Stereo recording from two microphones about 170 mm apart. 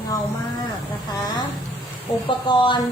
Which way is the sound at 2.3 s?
30° left (ahead or behind).